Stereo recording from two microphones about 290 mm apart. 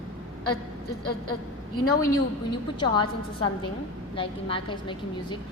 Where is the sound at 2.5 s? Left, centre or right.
Centre.